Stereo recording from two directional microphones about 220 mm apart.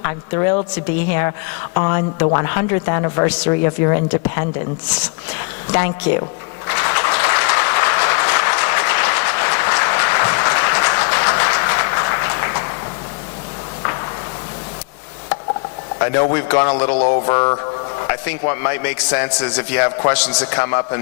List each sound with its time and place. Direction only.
0.0 s speech: 20° left (ahead or behind)
1.7 s speech: 20° left (ahead or behind)
6.7 s applause: 15° left (ahead or behind)
16.0 s a man's voice: 20° left (ahead or behind)